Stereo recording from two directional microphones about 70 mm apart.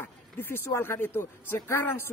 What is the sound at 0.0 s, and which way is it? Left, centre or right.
Speech, left.